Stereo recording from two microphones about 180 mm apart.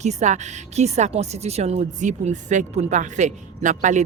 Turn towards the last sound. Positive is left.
turn(degrees=-45)  # may be behind; listen again after turning